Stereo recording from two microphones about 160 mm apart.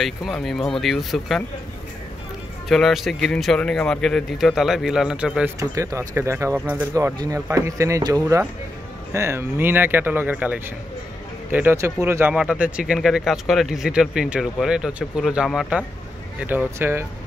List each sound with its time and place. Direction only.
0.0 s speech: centre (ahead or behind)
2.7 s speech: centre (ahead or behind)
5.6 s speech: 20° right (ahead or behind)